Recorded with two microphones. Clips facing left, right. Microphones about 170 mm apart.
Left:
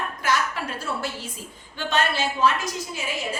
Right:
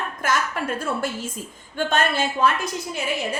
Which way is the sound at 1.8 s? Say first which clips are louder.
Right 3 dB; 50° right (ahead or behind).